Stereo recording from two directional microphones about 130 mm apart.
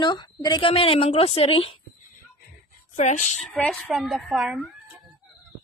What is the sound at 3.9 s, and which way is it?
Speech, centre (ahead or behind).